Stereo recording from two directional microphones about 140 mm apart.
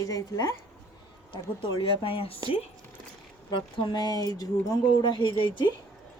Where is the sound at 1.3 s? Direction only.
35° left (ahead or behind).